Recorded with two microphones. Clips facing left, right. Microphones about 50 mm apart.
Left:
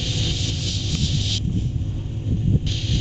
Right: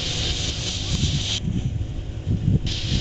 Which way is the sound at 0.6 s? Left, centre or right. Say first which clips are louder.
Left 1 dB; right.